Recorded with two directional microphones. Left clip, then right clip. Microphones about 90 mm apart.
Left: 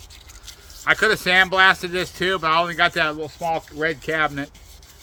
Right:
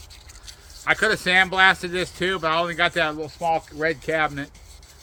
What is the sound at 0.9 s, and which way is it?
Speech, 55° left (ahead or behind).